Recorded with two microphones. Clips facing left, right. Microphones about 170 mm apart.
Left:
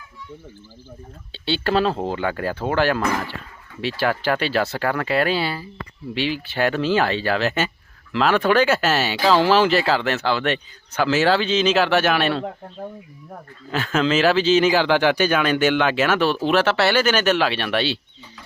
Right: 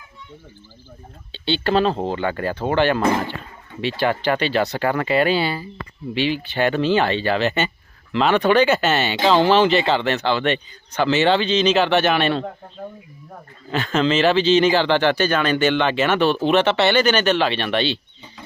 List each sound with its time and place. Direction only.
1.3 s speech: 5° left (ahead or behind)
3.0 s speech: 25° right (ahead or behind)
3.8 s speech: centre (ahead or behind)
13.7 s speech: 5° left (ahead or behind)